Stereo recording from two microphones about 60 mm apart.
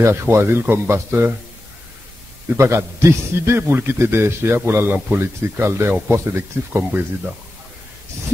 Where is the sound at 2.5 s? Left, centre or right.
Right.